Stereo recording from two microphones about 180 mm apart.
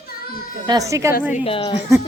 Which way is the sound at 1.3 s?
30° left (ahead or behind).